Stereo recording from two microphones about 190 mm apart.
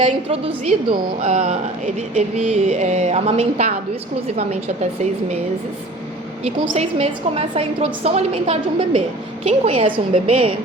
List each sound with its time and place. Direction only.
0.0 s a woman's voice: 30° right (ahead or behind)
6.4 s a woman's voice: 35° right (ahead or behind)